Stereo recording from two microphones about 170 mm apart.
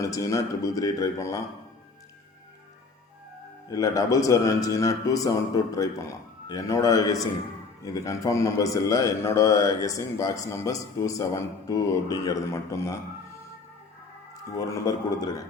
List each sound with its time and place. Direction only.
0.0 s a man's voice: 20° left (ahead or behind)
3.7 s a man's voice: 20° left (ahead or behind)
14.5 s a man's voice: 20° left (ahead or behind)